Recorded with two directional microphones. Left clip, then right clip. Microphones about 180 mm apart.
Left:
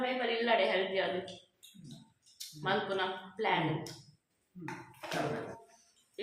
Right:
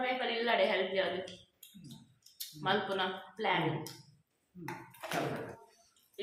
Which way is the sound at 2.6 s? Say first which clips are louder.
Even; 5° right (ahead or behind).